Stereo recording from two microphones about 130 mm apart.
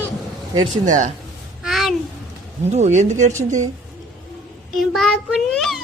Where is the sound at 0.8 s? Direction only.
75° right (ahead or behind).